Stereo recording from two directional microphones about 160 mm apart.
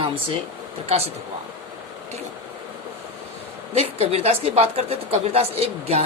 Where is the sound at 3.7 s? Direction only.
40° right (ahead or behind).